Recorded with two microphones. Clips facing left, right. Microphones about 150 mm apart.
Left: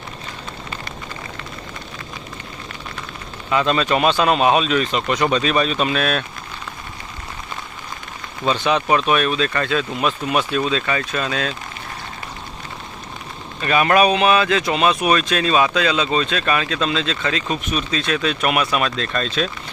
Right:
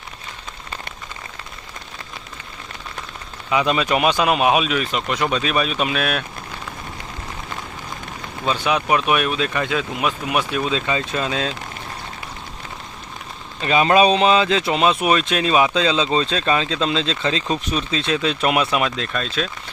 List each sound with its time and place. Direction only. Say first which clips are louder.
3.5 s speech: left 1 dB; 10° right (ahead or behind)
8.4 s speech: left 2 dB; 10° right (ahead or behind)
13.6 s speech: right 1 dB; 20° right (ahead or behind)
19.1 s speech: left 2 dB; 5° right (ahead or behind)